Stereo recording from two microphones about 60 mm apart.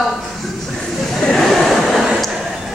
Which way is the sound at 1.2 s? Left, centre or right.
Centre.